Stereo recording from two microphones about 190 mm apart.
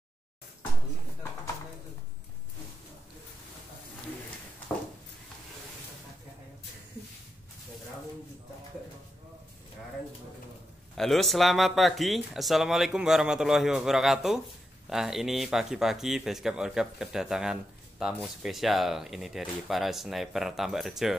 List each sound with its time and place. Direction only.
11.0 s speech: centre (ahead or behind)